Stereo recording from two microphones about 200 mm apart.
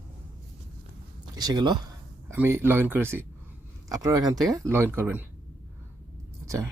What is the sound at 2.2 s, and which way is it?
Speech, 10° right (ahead or behind).